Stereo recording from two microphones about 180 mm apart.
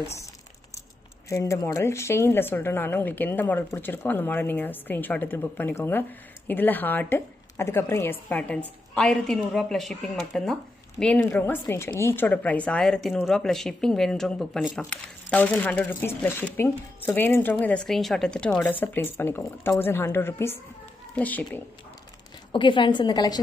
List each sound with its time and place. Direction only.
1.3 s a woman's voice: 15° left (ahead or behind)
22.5 s a woman's voice: 25° left (ahead or behind)